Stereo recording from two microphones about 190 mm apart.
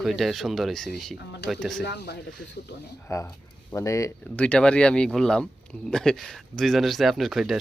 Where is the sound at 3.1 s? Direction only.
15° left (ahead or behind).